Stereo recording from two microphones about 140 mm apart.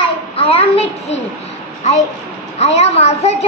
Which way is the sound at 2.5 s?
50° left (ahead or behind).